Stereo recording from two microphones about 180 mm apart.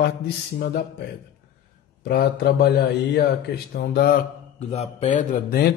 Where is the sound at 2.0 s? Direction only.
65° left (ahead or behind).